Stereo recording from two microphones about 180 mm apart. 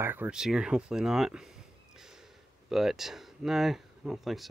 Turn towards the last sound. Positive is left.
turn(degrees=0)  # may be behind; listen again after turning